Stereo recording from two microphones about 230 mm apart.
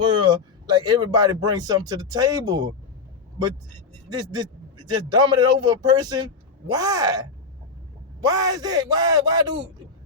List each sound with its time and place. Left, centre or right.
0.1 s speech: centre
4.1 s speech: centre